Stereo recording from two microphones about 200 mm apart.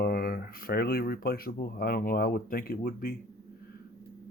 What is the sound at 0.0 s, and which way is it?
Speech, 50° left (ahead or behind).